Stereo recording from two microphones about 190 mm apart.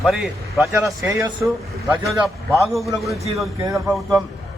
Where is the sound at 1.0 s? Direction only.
15° right (ahead or behind).